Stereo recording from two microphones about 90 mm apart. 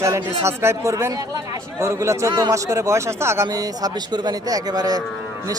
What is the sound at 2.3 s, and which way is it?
Speech, 50° right (ahead or behind).